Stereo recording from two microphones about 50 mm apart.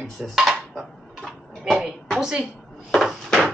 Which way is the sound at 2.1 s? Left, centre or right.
Centre.